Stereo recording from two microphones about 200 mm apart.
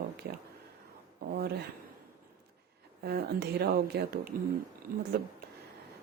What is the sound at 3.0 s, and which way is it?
A woman's voice, 50° right (ahead or behind).